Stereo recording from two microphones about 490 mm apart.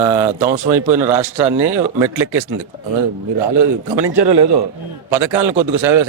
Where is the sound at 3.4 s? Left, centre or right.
Right.